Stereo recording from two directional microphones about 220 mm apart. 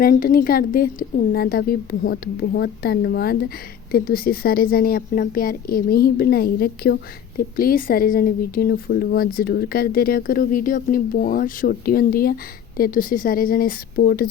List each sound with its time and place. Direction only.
0.0 s a woman's voice: 40° left (ahead or behind)